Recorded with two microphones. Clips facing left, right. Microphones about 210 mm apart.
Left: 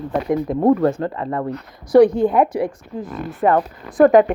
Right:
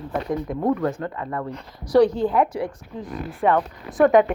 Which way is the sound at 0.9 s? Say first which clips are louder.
Left 5 dB; 30° left (ahead or behind).